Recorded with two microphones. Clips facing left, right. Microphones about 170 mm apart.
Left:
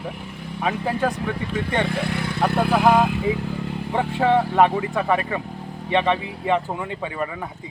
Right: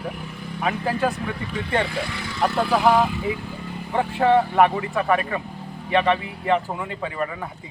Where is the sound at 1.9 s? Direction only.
55° left (ahead or behind).